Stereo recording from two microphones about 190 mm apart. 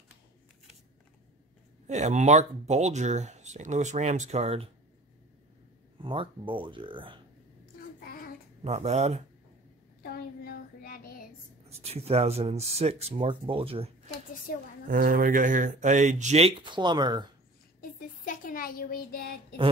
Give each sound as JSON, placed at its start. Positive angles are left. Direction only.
{"t": 1.9, "sound": "speech", "side_deg": -35}
{"t": 6.0, "sound": "speech", "side_deg": -25}
{"t": 8.0, "sound": "child singing", "side_deg": 50}
{"t": 8.6, "sound": "speech", "side_deg": -35}
{"t": 10.0, "sound": "child singing", "side_deg": 55}
{"t": 11.7, "sound": "speech", "side_deg": -35}
{"t": 14.9, "sound": "speech", "side_deg": -50}
{"t": 17.7, "sound": "a sound", "side_deg": 45}